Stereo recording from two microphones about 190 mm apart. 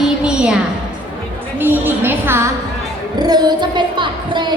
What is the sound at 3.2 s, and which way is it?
Music, 20° right (ahead or behind).